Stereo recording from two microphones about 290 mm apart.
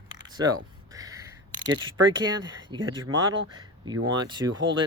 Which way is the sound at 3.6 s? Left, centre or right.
Centre.